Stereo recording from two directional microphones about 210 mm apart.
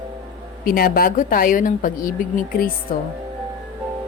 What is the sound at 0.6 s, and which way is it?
A woman's voice, 45° left (ahead or behind).